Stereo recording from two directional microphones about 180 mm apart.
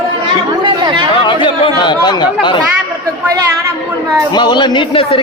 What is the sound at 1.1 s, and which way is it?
A man's voice, 25° left (ahead or behind).